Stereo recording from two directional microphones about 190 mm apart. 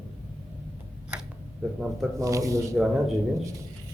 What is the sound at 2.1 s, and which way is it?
Speech, 15° right (ahead or behind).